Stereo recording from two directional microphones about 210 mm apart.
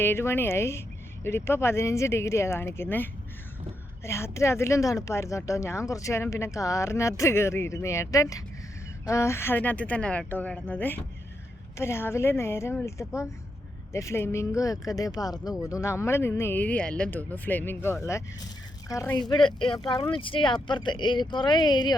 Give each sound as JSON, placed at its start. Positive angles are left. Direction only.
{"t": 0.0, "sound": "a woman's voice", "side_deg": 10}